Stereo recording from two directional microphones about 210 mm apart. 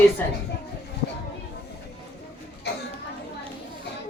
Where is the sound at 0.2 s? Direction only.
10° left (ahead or behind).